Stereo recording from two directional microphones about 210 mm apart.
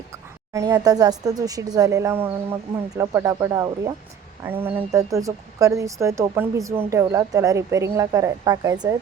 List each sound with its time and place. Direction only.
0.5 s speech: 15° right (ahead or behind)